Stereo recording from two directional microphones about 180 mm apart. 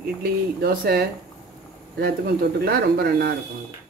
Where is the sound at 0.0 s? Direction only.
60° right (ahead or behind).